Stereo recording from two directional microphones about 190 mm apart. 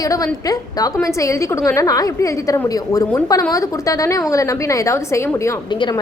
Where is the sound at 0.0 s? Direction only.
20° left (ahead or behind).